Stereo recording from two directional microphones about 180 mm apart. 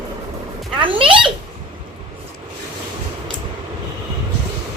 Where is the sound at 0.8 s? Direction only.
30° right (ahead or behind).